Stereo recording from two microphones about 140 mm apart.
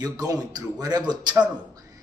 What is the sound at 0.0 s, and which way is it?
Speech, 25° right (ahead or behind).